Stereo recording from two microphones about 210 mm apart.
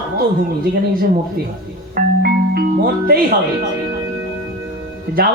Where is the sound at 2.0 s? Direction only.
45° right (ahead or behind).